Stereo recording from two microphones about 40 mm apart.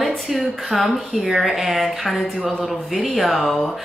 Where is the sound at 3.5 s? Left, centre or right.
Centre.